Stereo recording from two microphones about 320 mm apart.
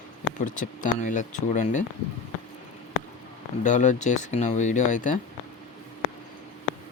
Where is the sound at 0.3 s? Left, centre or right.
Left.